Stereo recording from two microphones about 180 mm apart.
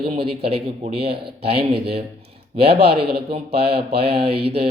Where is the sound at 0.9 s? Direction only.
65° right (ahead or behind).